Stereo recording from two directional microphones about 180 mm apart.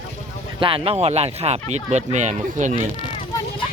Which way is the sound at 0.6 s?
30° right (ahead or behind).